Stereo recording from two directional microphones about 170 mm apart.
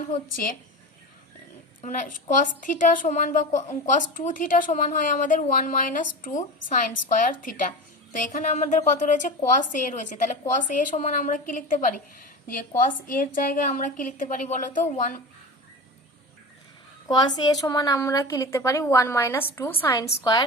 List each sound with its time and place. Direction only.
0.1 s a woman's voice: 55° left (ahead or behind)
1.8 s a woman's voice: 45° left (ahead or behind)
17.1 s a woman's voice: 25° left (ahead or behind)